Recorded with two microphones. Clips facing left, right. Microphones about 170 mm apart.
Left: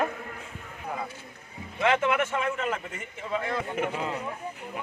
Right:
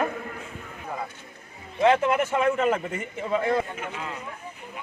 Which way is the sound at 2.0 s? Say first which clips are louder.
Right 4 dB; 35° right (ahead or behind).